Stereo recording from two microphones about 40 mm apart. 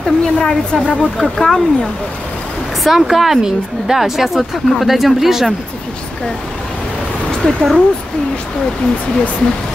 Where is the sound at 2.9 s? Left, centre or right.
Centre.